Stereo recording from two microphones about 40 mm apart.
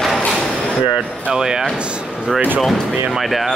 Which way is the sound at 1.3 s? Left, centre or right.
Centre.